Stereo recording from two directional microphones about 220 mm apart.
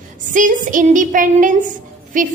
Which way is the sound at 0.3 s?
35° right (ahead or behind).